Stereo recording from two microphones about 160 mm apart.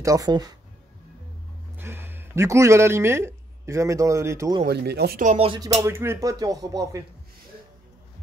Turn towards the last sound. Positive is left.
turn(degrees=-20)  # may be behind; listen again after turning